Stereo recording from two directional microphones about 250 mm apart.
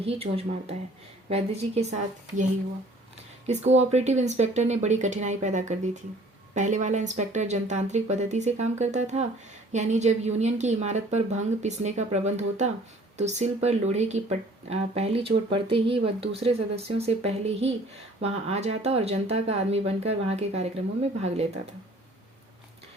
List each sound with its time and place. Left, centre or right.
0.0 s a woman's voice: right
3.4 s a woman's voice: right